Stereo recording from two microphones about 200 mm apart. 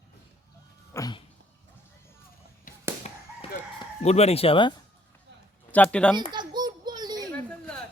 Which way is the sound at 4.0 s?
30° left (ahead or behind).